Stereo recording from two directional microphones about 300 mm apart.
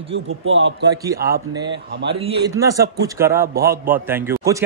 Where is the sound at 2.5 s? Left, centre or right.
Centre.